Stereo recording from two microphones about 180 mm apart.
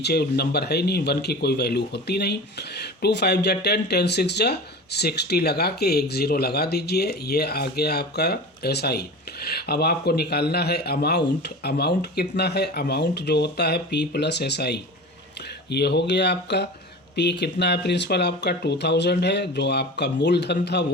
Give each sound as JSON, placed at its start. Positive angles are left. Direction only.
{"t": 0.0, "sound": "speech", "side_deg": 65}